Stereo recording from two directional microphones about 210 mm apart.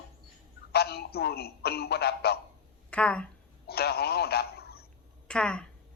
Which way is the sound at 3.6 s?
50° left (ahead or behind).